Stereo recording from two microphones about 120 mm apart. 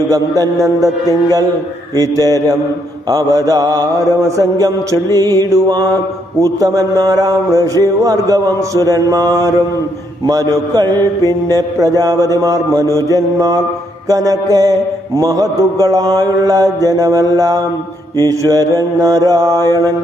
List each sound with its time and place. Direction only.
0.1 s mantra: 30° right (ahead or behind)